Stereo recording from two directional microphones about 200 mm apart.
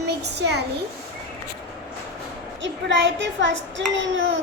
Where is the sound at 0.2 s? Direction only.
55° right (ahead or behind).